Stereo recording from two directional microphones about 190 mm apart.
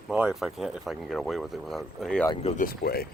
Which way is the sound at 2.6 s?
50° left (ahead or behind).